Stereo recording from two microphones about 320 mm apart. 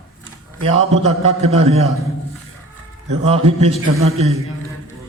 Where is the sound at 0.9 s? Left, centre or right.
Centre.